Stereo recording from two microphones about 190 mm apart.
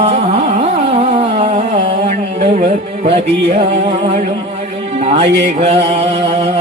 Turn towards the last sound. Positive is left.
turn(degrees=-30)  # may be behind; listen again after turning